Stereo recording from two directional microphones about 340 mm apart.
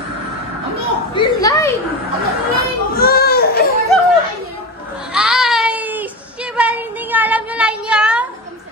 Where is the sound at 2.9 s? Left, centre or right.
Left.